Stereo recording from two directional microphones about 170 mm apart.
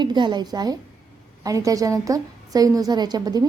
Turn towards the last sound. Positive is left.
turn(degrees=-25)  # may be behind; listen again after turning